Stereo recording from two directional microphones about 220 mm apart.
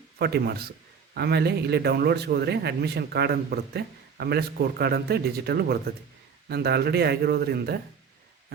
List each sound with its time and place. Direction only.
0.2 s a man's voice: 45° right (ahead or behind)